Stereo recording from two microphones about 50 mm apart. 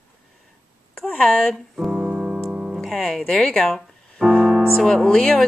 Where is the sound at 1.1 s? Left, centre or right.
Left.